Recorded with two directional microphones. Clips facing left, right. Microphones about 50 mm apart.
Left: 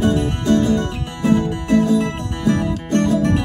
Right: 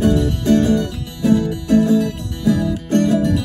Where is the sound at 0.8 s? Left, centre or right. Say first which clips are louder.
Right 1 dB; left.